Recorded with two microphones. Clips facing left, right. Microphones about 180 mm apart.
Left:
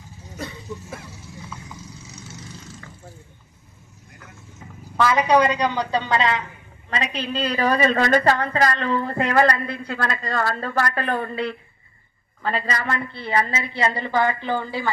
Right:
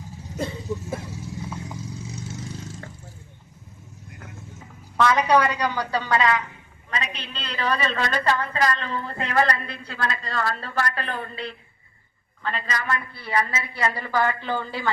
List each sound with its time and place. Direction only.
0.3 s vehicle: 25° right (ahead or behind)
4.9 s a woman's voice: 5° left (ahead or behind); by 8.2 s 45° left (ahead or behind)
8.6 s speech: 60° left (ahead or behind)
9.3 s speech: 45° left (ahead or behind)
12.5 s a woman's voice: 35° left (ahead or behind); by 14.8 s 15° left (ahead or behind)